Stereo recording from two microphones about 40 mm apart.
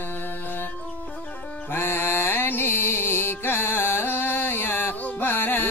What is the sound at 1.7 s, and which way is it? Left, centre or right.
Music, left.